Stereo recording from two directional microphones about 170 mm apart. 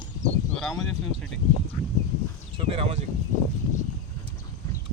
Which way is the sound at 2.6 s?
35° right (ahead or behind).